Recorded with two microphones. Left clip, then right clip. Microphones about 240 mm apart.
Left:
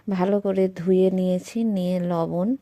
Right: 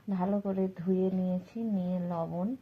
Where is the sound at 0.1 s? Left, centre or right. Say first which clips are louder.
Left 10 dB; left.